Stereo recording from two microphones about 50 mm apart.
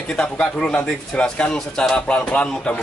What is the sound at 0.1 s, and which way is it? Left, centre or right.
A man's voice, centre.